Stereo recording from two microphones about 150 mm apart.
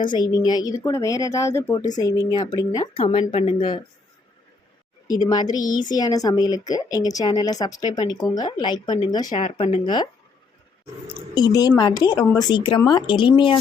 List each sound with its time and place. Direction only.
0.0 s a woman's voice: 30° left (ahead or behind)
5.0 s a woman's voice: 25° left (ahead or behind)
11.3 s a woman's voice: 25° left (ahead or behind)